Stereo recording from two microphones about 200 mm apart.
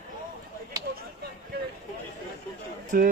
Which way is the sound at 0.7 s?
15° right (ahead or behind).